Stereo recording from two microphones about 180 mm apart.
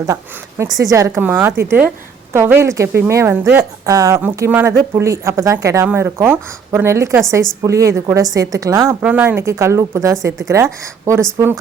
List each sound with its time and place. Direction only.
0.6 s a woman's voice: 20° right (ahead or behind)
9.0 s a woman's voice: 10° right (ahead or behind)